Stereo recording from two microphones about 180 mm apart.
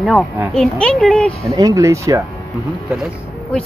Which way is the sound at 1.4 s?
15° right (ahead or behind).